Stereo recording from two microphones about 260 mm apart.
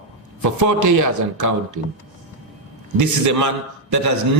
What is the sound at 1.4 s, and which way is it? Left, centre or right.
Speech, right.